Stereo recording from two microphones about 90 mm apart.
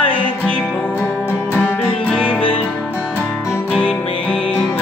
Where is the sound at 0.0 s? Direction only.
75° left (ahead or behind).